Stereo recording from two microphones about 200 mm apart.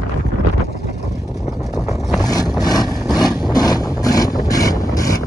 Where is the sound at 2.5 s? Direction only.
20° left (ahead or behind).